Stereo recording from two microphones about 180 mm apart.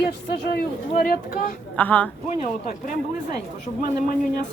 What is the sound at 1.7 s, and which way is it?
Speech, 10° left (ahead or behind).